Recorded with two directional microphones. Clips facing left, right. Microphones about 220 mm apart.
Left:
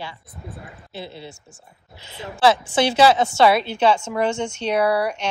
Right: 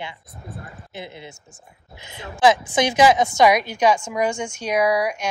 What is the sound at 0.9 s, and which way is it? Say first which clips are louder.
A woman's voice: left 2 dB; 15° right (ahead or behind).